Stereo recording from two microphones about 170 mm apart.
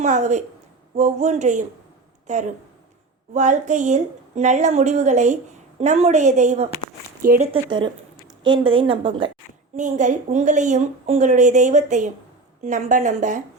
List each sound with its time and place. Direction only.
0.0 s a woman's voice: 45° right (ahead or behind)
7.2 s speech: 55° right (ahead or behind)
7.4 s a woman's voice: 30° right (ahead or behind)
9.7 s a woman's voice: 45° right (ahead or behind)